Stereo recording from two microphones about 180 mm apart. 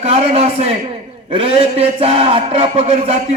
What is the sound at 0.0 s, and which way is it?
A man's voice, 35° right (ahead or behind).